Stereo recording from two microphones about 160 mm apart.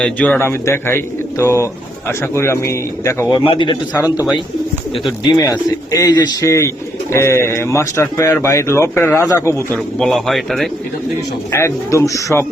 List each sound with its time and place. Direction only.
0.0 s speech: 10° left (ahead or behind)
3.3 s a man's voice: 30° left (ahead or behind)
3.9 s a man's voice: 10° right (ahead or behind)
5.2 s speech: 25° left (ahead or behind)
10.0 s a man's voice: centre (ahead or behind)
11.5 s speech: 20° left (ahead or behind)